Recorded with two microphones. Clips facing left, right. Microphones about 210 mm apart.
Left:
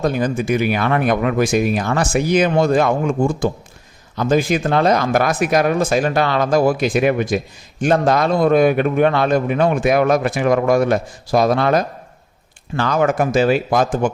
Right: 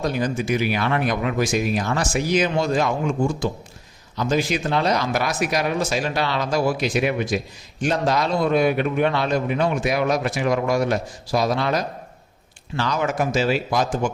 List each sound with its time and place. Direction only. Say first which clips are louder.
0.0 s speech: left 4 dB; 55° left (ahead or behind)